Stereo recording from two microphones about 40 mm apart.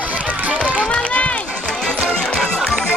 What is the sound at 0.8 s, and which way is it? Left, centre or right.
Run, left.